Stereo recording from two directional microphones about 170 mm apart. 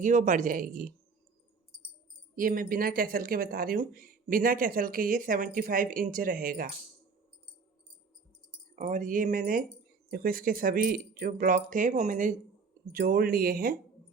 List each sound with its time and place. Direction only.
0.0 s speech: 50° right (ahead or behind)
2.3 s speech: 55° right (ahead or behind)
8.7 s speech: 50° right (ahead or behind)